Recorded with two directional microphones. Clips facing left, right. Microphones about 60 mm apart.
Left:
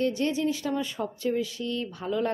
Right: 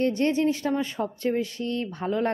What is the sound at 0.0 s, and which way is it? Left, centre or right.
Speech, right.